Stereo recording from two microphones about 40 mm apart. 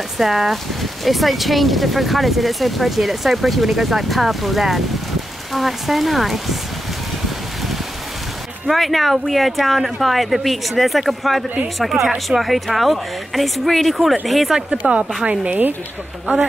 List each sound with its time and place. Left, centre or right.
0.2 s speech: centre
8.6 s speech: centre
14.7 s speech: right